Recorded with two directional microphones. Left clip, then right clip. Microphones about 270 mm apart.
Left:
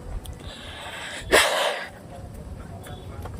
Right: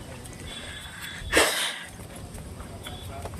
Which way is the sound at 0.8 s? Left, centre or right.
Left.